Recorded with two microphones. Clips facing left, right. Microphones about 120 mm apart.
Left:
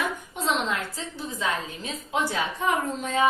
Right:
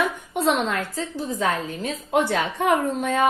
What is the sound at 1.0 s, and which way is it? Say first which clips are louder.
A woman's voice: right 6 dB; 45° right (ahead or behind).